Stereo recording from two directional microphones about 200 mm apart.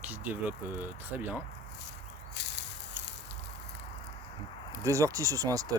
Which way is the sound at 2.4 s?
60° left (ahead or behind).